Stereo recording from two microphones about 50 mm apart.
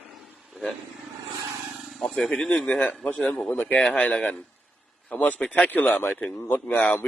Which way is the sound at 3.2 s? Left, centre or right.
Left.